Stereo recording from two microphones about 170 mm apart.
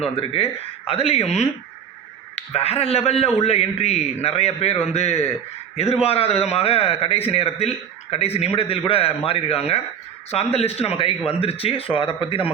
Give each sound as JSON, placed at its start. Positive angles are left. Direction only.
{"t": 0.2, "sound": "a man's voice", "side_deg": 35}